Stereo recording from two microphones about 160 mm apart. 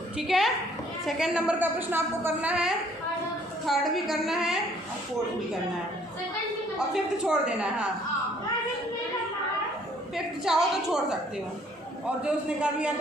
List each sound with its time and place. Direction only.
0.2 s a woman's voice: centre (ahead or behind)
6.7 s a woman's voice: 5° right (ahead or behind)
10.2 s a woman's voice: 5° right (ahead or behind)
12.2 s a woman's voice: 5° right (ahead or behind)